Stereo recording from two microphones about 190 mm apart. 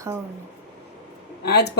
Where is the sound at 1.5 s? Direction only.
60° left (ahead or behind).